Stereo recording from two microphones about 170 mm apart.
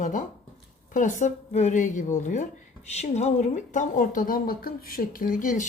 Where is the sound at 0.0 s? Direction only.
50° left (ahead or behind).